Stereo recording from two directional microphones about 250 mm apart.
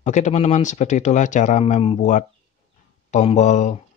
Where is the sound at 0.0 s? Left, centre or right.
Left.